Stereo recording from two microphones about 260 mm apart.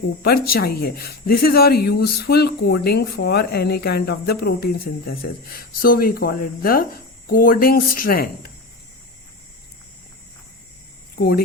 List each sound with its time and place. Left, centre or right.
0.2 s speech: left
11.2 s speech: left